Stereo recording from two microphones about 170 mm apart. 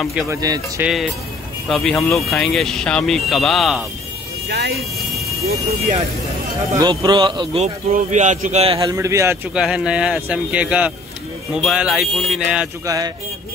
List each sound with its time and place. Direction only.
0.3 s speech: 20° right (ahead or behind)
0.8 s speech: 5° right (ahead or behind)
4.5 s speech: 75° right (ahead or behind)
6.8 s speech: 25° right (ahead or behind)
7.9 s a man's voice: 45° right (ahead or behind)
8.7 s a man's voice: 20° right (ahead or behind)
9.5 s speech: 5° right (ahead or behind)
12.8 s speech: 20° right (ahead or behind)